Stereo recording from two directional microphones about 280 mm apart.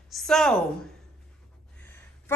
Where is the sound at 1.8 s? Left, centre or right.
Centre.